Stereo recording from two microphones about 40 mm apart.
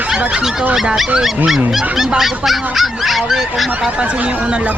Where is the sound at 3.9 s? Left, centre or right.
Right.